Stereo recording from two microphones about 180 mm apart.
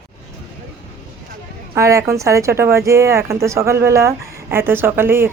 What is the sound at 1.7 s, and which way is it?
Speech, 15° right (ahead or behind).